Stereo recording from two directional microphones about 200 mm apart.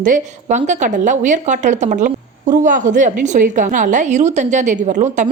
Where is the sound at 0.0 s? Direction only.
40° right (ahead or behind).